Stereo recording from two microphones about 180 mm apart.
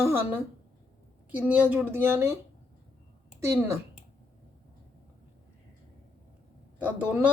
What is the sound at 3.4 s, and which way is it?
Speech, 15° right (ahead or behind).